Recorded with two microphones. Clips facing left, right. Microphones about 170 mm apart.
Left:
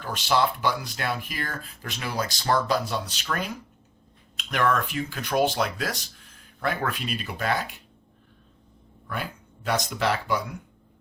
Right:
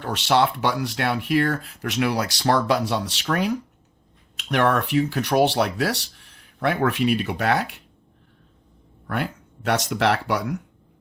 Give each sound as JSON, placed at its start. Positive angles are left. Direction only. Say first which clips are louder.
{"t": 0.0, "sound": "speech", "louder": "right 4 dB", "side_deg": -70}
{"t": 4.7, "sound": "speech", "louder": "right 6 dB", "side_deg": -70}
{"t": 9.0, "sound": "speech", "louder": "right 6 dB", "side_deg": -65}